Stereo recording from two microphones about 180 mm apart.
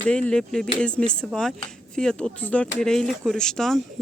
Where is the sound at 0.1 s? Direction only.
5° left (ahead or behind).